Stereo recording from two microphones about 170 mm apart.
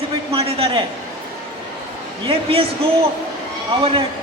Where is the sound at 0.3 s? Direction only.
35° right (ahead or behind).